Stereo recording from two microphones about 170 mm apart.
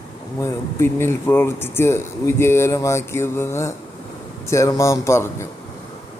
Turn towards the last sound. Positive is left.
turn(degrees=15)  # may be behind; listen again after turning